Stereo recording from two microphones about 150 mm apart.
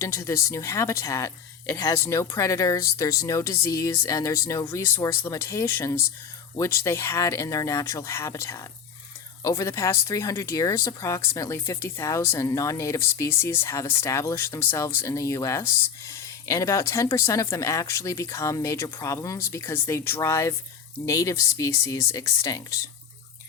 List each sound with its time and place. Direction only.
0.0 s speech: 20° left (ahead or behind)